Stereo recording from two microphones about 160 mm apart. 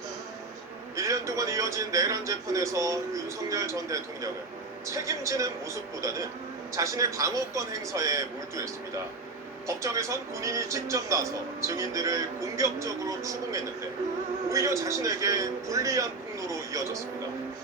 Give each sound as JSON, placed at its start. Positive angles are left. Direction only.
{"t": 0.9, "sound": "speech", "side_deg": -20}